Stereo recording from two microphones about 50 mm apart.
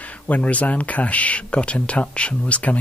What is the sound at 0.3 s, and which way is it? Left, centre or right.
Speech, left.